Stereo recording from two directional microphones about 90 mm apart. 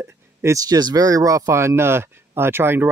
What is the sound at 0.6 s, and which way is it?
Speech, 45° right (ahead or behind).